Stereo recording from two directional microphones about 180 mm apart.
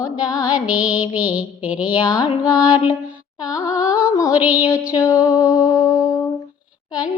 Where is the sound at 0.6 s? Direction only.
10° right (ahead or behind).